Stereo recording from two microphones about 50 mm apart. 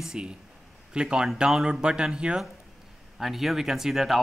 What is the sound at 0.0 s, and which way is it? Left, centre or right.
Speech, centre.